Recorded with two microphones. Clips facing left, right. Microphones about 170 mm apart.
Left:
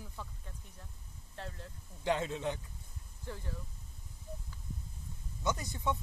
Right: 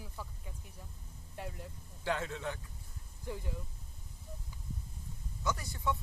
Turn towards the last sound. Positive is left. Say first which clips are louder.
# left 1 dB
turn(degrees=20)  # may be behind; listen again after turning